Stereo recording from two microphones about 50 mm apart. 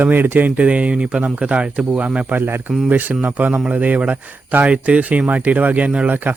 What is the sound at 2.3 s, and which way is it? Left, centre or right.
Speech, right.